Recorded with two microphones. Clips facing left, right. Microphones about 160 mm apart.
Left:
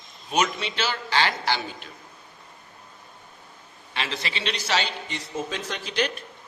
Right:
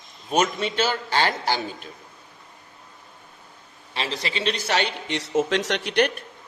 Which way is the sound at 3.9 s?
35° right (ahead or behind).